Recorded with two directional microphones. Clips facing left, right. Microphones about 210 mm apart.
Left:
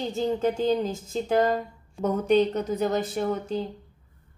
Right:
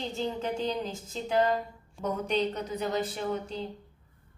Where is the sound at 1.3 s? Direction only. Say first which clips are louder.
Left 3 dB; 50° left (ahead or behind).